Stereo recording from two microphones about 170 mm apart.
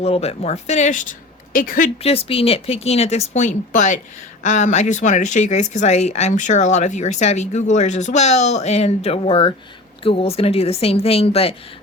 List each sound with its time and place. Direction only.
0.0 s speech: 35° left (ahead or behind); by 1.9 s 55° left (ahead or behind)
2.0 s speech: 35° left (ahead or behind)